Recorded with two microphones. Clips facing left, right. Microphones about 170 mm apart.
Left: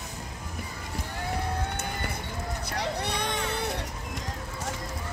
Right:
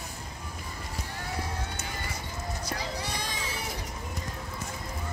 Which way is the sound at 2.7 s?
60° left (ahead or behind).